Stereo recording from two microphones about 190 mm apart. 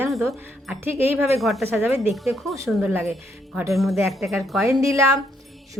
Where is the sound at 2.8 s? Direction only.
10° right (ahead or behind).